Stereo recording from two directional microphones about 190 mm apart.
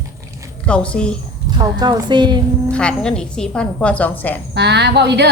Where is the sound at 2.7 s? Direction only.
5° left (ahead or behind).